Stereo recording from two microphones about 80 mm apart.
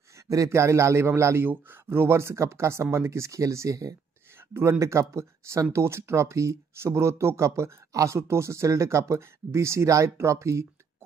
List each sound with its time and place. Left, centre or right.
0.3 s speech: right